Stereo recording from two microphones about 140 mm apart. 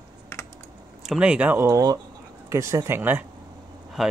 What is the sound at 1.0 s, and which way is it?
Speech, 5° right (ahead or behind).